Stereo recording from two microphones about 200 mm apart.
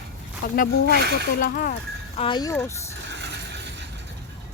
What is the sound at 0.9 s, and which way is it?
Speech, 55° right (ahead or behind).